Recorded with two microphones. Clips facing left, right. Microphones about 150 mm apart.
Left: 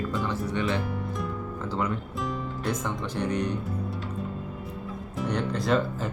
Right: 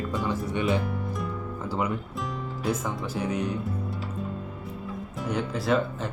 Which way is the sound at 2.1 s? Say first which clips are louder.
Left 2 dB; 5° right (ahead or behind).